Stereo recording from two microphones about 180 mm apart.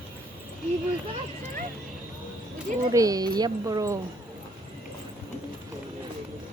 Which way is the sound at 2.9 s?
20° right (ahead or behind).